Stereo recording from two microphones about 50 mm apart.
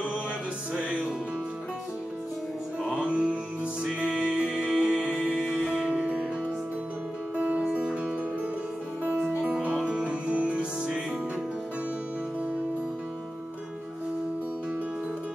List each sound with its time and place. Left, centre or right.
3.0 s music: right
7.3 s music: right
9.4 s music: right